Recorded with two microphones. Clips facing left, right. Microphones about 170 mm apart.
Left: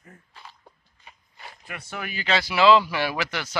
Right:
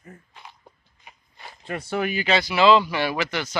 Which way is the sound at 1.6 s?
30° right (ahead or behind).